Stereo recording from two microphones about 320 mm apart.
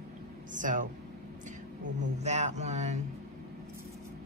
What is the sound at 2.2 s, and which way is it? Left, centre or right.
Speech, right.